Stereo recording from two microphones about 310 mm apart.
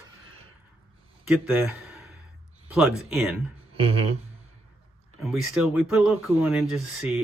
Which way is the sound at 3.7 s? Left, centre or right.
Centre.